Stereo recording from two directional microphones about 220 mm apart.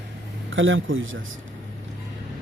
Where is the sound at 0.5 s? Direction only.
60° right (ahead or behind).